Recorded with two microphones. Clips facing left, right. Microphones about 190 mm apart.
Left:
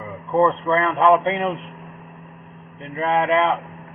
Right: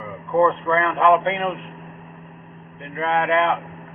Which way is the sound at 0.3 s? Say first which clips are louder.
Even; 15° left (ahead or behind).